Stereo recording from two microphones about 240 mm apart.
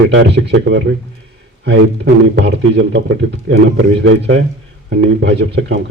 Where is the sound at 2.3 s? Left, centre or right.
Right.